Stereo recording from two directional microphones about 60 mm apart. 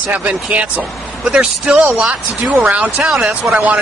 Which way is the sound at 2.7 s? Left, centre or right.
Right.